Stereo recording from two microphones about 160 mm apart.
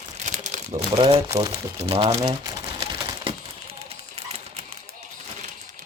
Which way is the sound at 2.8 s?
35° right (ahead or behind).